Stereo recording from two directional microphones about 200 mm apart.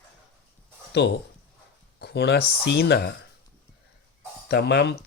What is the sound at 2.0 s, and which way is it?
Speech, 55° left (ahead or behind).